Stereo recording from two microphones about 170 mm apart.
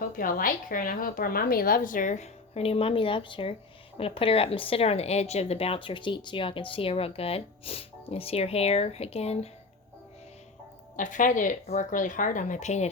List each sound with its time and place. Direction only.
0.0 s a woman's voice: 55° left (ahead or behind); by 9.5 s 35° left (ahead or behind)
10.9 s a woman's voice: 50° left (ahead or behind)